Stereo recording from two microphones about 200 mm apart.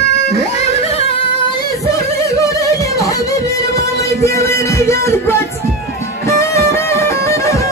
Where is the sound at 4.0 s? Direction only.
15° left (ahead or behind).